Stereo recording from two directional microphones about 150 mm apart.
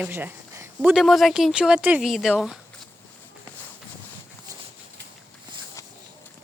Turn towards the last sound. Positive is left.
turn(degrees=20)  # may be behind; listen again after turning